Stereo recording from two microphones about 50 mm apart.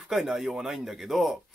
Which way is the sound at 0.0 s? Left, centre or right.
Centre.